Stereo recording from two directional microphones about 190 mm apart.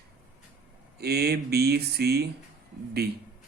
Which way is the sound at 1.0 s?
55° right (ahead or behind).